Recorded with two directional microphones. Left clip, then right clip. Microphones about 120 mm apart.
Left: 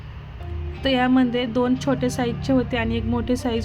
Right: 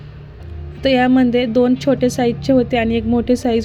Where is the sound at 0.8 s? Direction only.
45° right (ahead or behind).